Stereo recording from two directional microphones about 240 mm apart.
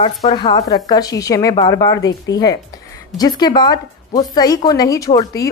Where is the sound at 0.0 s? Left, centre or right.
Left.